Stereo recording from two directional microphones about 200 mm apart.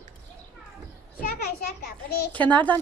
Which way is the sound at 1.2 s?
45° left (ahead or behind).